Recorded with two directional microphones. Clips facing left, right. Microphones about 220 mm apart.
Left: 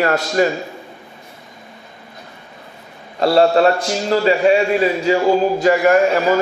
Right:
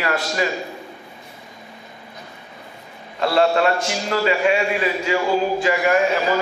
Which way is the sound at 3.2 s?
35° left (ahead or behind).